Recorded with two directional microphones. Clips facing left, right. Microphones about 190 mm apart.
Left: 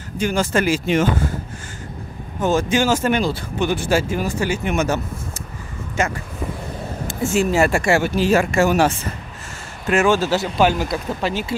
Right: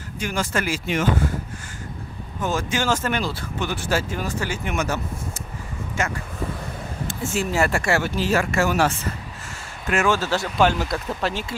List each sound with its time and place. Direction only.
0.2 s speech: 30° left (ahead or behind)
2.4 s speech: 25° left (ahead or behind)
4.7 s speech: 25° left (ahead or behind)
7.1 s speech: 15° left (ahead or behind)
10.6 s speech: 5° left (ahead or behind)